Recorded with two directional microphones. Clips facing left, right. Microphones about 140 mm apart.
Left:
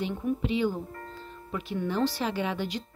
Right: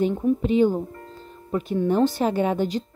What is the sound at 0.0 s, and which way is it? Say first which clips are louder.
Speech: right 8 dB; 30° right (ahead or behind).